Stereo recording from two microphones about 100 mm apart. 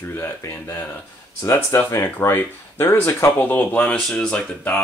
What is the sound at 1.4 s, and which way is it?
Speech, 30° left (ahead or behind).